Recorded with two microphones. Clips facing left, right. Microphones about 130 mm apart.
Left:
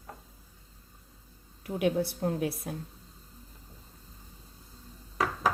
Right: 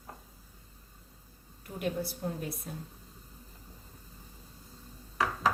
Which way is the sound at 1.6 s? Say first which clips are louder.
Left 6 dB; 80° left.